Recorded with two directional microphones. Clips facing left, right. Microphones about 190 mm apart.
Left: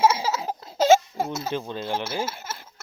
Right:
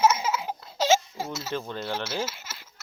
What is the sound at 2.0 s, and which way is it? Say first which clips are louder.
Speech: left 2 dB; 55° left (ahead or behind).